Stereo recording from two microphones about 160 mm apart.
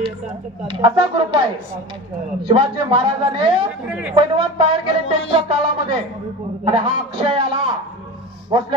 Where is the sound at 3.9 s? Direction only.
10° right (ahead or behind).